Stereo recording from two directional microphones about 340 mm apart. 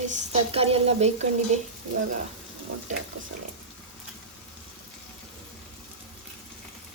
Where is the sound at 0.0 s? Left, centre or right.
Centre.